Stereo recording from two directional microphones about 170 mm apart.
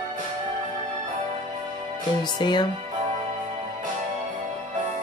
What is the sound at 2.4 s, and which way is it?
Speech, 25° left (ahead or behind).